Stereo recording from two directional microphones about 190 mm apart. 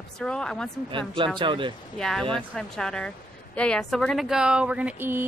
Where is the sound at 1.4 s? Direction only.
25° right (ahead or behind).